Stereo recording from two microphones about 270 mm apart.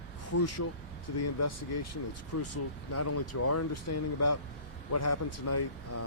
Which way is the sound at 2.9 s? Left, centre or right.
Left.